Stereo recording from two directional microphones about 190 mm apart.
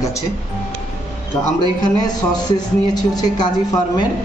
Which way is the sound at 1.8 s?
20° left (ahead or behind).